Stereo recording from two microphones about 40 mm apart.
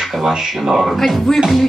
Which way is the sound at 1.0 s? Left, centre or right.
Centre.